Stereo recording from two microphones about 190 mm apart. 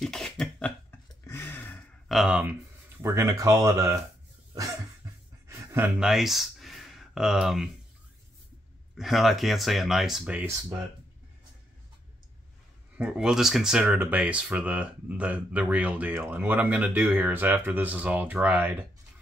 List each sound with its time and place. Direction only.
0.0 s cough: centre (ahead or behind)
1.2 s a sound: 10° left (ahead or behind)
2.0 s speech: 5° right (ahead or behind)
5.0 s a sound: 20° right (ahead or behind)
5.9 s speech: centre (ahead or behind)
8.9 s speech: centre (ahead or behind)
12.9 s speech: 5° right (ahead or behind)